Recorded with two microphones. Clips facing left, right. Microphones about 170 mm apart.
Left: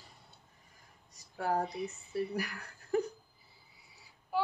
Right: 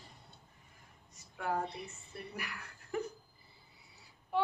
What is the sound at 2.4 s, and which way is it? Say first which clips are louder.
Speech: left 6 dB; 35° left (ahead or behind).